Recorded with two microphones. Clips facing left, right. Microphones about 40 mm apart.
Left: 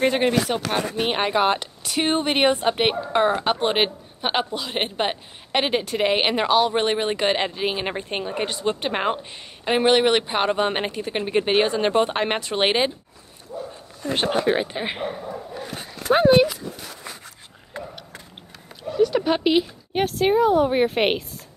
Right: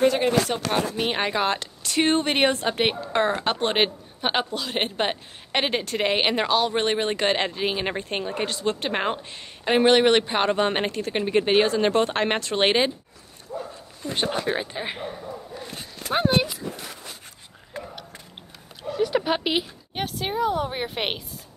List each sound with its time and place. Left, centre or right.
0.5 s a woman's voice: centre
14.0 s speech: left
18.8 s speech: centre
19.9 s speech: centre